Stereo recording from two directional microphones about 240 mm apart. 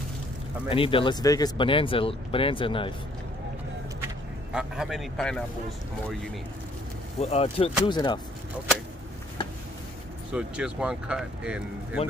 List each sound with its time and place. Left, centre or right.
0.7 s speech: left
4.5 s speech: centre
7.2 s speech: left
10.3 s speech: centre